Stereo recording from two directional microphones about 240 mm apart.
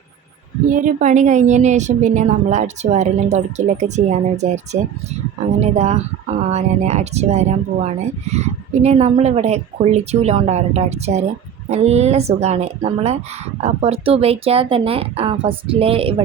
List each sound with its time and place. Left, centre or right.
0.7 s speech: right